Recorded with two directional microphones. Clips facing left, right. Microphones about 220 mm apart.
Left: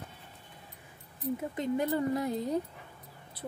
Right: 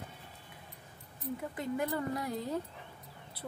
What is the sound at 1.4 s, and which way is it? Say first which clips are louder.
Speech: left 3 dB; 25° left (ahead or behind).